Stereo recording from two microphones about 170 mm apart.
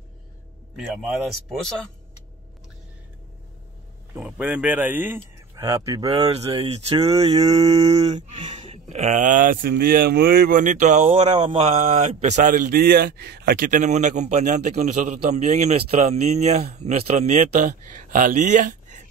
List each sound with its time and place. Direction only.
0.7 s speech: 5° right (ahead or behind)
4.1 s speech: 10° right (ahead or behind)
6.0 s speech: 30° right (ahead or behind)
11.3 s speech: 35° right (ahead or behind)